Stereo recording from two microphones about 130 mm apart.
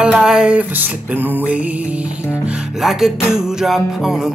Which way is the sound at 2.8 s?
5° right (ahead or behind).